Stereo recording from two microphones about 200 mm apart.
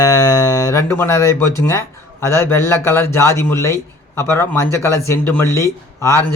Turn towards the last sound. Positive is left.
turn(degrees=15)  # may be behind; listen again after turning